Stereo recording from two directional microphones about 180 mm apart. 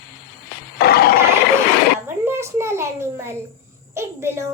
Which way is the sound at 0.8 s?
60° left (ahead or behind).